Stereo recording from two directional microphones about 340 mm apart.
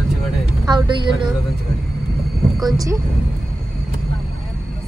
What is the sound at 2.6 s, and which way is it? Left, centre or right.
Speech, centre.